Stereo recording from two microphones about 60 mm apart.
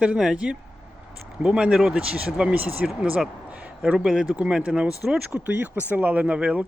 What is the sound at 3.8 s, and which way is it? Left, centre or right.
Speech, centre.